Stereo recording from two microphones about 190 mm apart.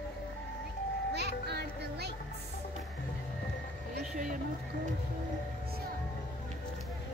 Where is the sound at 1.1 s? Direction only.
60° right (ahead or behind).